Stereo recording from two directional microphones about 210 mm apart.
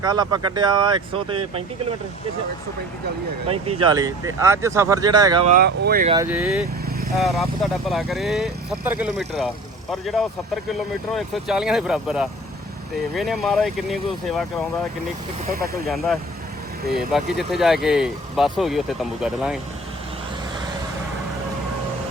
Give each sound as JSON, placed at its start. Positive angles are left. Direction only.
{"t": 0.0, "sound": "speech", "side_deg": -20}
{"t": 3.5, "sound": "speech", "side_deg": -25}
{"t": 5.5, "sound": "speech", "side_deg": -45}
{"t": 6.2, "sound": "speech", "side_deg": -5}
{"t": 17.1, "sound": "speech", "side_deg": 0}